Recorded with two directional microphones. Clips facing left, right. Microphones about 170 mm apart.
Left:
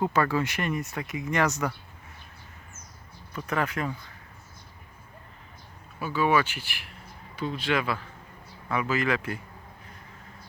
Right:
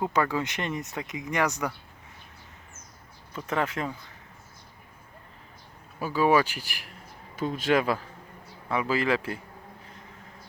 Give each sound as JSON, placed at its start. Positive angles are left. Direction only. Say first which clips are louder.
{"t": 0.0, "sound": "speech", "louder": "left 1 dB", "side_deg": -15}
{"t": 3.3, "sound": "a man's voice", "louder": "even", "side_deg": -25}
{"t": 6.0, "sound": "speech", "louder": "right 2 dB", "side_deg": -35}
{"t": 8.7, "sound": "a man's voice", "louder": "right 1 dB", "side_deg": -30}